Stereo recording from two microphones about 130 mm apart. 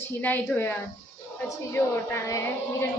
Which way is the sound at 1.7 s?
20° left (ahead or behind).